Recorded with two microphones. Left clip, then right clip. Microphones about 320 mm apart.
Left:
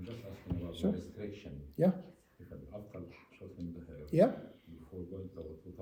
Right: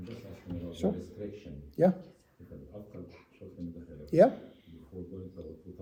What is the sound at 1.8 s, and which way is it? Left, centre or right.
Speech, centre.